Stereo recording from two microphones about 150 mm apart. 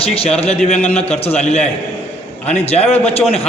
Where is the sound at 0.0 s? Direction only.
40° left (ahead or behind).